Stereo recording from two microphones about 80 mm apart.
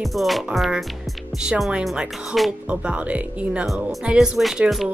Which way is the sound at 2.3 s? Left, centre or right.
Centre.